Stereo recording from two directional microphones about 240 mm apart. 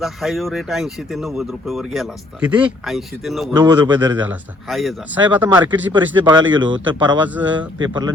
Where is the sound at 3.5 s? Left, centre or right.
Centre.